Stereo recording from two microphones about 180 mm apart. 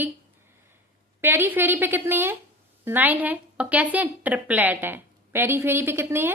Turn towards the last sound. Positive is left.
turn(degrees=-10)  # may be behind; listen again after turning